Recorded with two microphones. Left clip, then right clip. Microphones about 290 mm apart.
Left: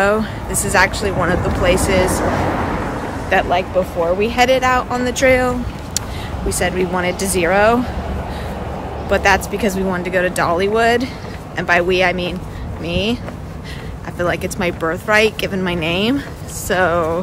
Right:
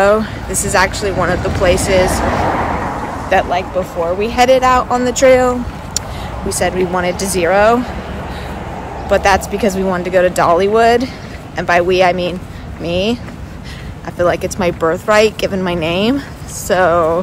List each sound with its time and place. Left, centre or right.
0.0 s speech: centre
2.3 s vehicle: right
3.3 s speech: centre
9.1 s speech: centre